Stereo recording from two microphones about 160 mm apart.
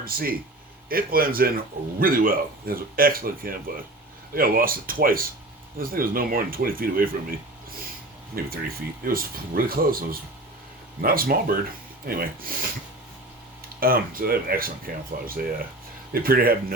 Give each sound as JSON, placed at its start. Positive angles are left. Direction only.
{"t": 0.0, "sound": "a man's voice", "side_deg": -65}
{"t": 8.4, "sound": "a man's voice", "side_deg": -70}
{"t": 13.7, "sound": "a man's voice", "side_deg": -65}